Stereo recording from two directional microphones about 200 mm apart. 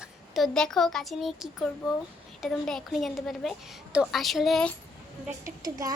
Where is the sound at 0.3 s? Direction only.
Centre (ahead or behind).